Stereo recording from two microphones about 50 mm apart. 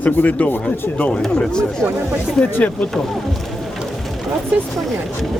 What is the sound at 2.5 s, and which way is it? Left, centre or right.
Speech, left.